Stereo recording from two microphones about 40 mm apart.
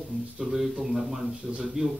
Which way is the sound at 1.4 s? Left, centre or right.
Right.